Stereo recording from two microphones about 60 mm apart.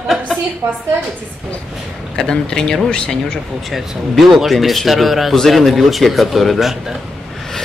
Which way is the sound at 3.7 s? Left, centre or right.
Centre.